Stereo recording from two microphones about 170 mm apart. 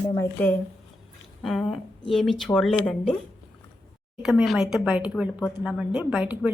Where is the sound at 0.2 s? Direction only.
10° left (ahead or behind).